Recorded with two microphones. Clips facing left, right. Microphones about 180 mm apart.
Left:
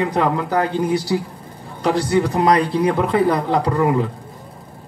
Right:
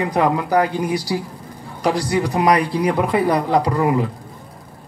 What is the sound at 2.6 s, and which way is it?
Speech, 25° left (ahead or behind).